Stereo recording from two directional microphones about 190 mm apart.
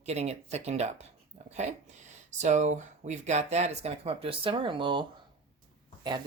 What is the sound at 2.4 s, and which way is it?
Speech, 40° right (ahead or behind).